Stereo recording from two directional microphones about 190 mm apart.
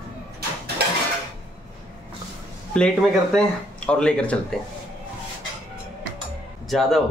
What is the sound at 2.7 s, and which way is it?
Speech, 5° left (ahead or behind).